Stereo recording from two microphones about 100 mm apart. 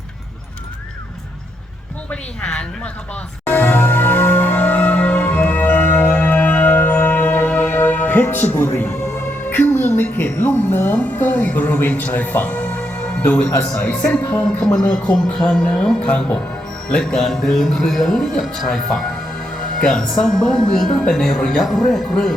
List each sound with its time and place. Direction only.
2.0 s a woman's voice: 10° left (ahead or behind)
3.4 s music: 20° left (ahead or behind)
9.5 s a woman's voice: 20° left (ahead or behind); by 22.4 s 5° left (ahead or behind)